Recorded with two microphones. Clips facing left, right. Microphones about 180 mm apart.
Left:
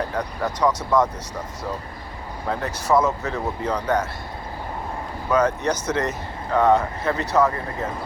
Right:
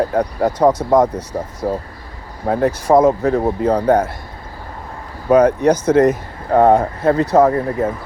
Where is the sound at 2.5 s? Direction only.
50° right (ahead or behind).